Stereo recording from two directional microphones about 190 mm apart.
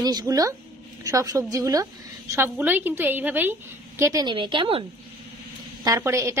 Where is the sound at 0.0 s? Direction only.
20° right (ahead or behind).